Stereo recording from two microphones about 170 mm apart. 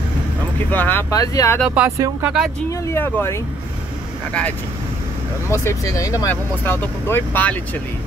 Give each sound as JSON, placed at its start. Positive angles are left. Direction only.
{"t": 0.7, "sound": "speech", "side_deg": 10}
{"t": 1.8, "sound": "speech", "side_deg": -15}
{"t": 2.9, "sound": "speech", "side_deg": 15}